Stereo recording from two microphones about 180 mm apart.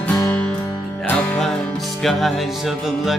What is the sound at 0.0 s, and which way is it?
Music, 5° left (ahead or behind).